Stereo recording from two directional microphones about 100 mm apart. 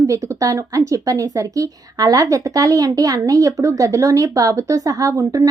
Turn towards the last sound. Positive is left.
turn(degrees=-35)  # may be behind; listen again after turning